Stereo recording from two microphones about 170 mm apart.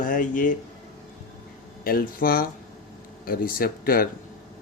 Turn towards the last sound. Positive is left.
turn(degrees=60)  # may be behind; listen again after turning